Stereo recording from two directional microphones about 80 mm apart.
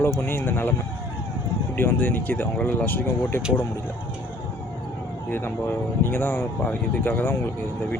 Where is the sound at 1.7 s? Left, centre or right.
Left.